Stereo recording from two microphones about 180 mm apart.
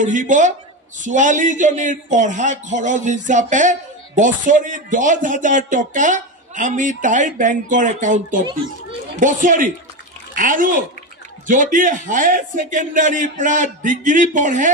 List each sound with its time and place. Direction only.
0.0 s speech: 45° right (ahead or behind)